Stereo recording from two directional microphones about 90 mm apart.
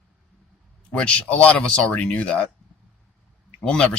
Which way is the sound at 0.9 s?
15° left (ahead or behind).